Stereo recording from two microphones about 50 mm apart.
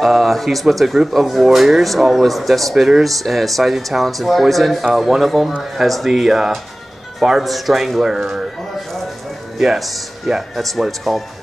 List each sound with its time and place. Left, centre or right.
0.0 s speech: centre
9.6 s speech: centre